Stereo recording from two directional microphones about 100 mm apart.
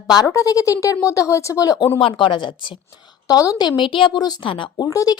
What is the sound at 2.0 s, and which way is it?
Speech, 60° left (ahead or behind).